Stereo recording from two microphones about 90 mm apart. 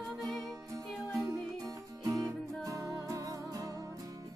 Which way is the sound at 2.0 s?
40° right (ahead or behind).